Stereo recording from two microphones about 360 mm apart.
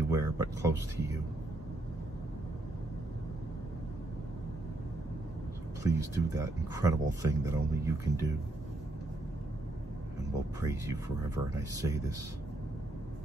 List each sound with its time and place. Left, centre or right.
0.1 s speech: centre
5.9 s speech: centre
10.6 s speech: centre